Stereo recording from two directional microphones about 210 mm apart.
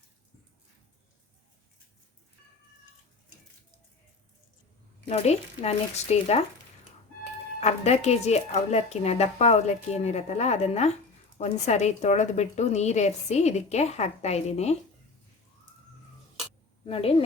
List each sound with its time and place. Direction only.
5.0 s a woman's voice: 30° left (ahead or behind)
7.6 s a woman's voice: 30° left (ahead or behind)
16.8 s a woman's voice: 25° left (ahead or behind)